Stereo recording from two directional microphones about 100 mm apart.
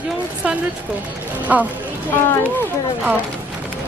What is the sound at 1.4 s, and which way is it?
Speech, 15° right (ahead or behind).